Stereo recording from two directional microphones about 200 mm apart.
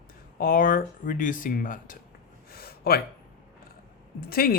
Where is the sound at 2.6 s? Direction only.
50° left (ahead or behind).